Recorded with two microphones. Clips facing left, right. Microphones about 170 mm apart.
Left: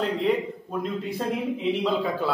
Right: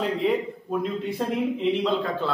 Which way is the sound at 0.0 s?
Centre (ahead or behind).